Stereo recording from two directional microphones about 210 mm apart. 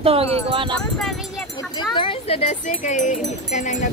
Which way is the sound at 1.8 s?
25° left (ahead or behind).